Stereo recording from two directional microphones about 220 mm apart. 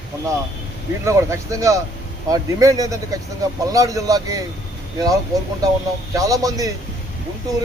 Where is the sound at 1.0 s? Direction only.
15° right (ahead or behind).